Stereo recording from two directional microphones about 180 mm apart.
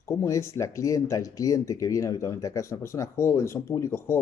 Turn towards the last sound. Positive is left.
turn(degrees=15)  # may be behind; listen again after turning